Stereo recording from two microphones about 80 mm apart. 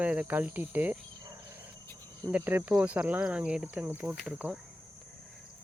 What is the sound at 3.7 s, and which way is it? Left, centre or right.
Speech, right.